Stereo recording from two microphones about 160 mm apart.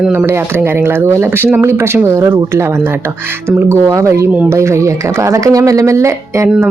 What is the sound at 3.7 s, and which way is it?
Speech, 15° right (ahead or behind).